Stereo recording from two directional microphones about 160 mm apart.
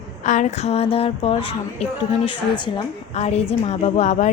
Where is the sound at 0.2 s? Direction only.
50° left (ahead or behind).